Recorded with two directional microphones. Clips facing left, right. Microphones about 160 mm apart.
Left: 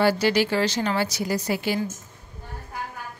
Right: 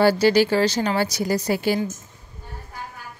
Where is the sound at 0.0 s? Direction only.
35° right (ahead or behind).